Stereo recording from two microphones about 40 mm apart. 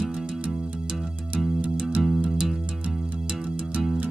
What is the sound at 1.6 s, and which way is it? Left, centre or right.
Music, right.